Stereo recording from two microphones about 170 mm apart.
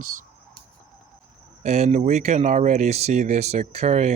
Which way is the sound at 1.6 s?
40° right (ahead or behind).